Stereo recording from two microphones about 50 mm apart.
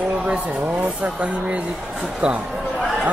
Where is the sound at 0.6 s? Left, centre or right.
Right.